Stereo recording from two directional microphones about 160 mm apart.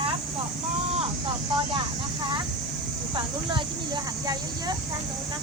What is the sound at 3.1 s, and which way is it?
Speech, 30° right (ahead or behind).